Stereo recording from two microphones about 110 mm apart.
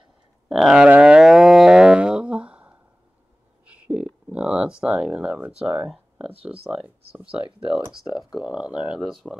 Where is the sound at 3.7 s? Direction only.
10° right (ahead or behind).